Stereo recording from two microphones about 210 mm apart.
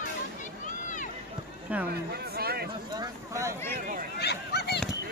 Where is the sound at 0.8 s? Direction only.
35° left (ahead or behind).